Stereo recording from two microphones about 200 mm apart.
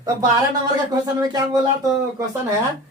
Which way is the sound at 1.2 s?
20° right (ahead or behind).